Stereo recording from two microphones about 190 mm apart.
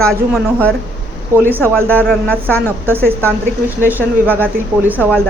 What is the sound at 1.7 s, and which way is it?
Speech, 5° left (ahead or behind).